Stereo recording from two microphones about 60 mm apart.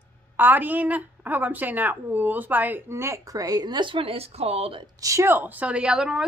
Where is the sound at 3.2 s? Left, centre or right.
Right.